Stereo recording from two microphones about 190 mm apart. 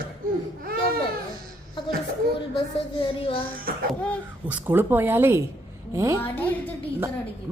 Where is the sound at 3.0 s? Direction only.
25° left (ahead or behind).